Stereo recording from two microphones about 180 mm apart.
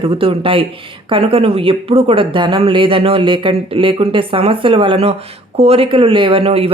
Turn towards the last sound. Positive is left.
turn(degrees=-30)  # may be behind; listen again after turning